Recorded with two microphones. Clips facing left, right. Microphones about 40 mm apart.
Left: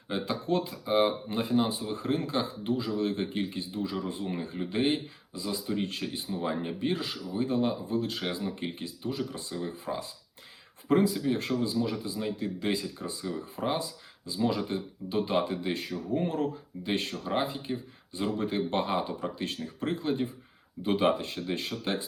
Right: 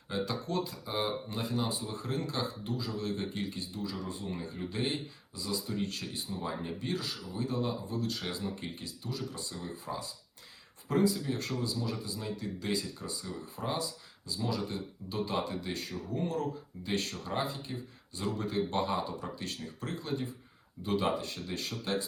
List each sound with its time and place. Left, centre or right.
0.1 s speech: left